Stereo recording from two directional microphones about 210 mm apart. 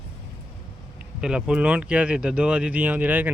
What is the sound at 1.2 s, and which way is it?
Speech, 5° right (ahead or behind).